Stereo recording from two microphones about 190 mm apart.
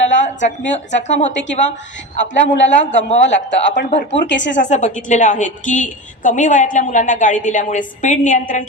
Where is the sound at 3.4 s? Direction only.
70° left (ahead or behind).